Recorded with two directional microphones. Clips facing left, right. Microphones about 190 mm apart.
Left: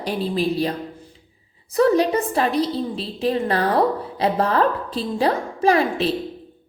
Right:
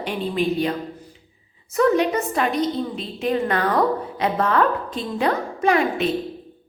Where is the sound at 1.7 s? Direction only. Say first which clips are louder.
Left 1 dB; 35° left (ahead or behind).